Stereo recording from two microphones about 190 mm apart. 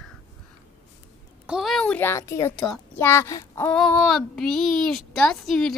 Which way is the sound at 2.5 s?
5° left (ahead or behind).